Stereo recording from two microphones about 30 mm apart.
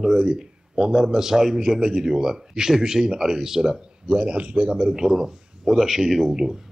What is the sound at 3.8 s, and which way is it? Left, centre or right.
A man's voice, right.